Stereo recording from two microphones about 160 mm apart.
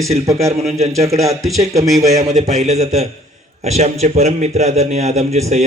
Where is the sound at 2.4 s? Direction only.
45° right (ahead or behind).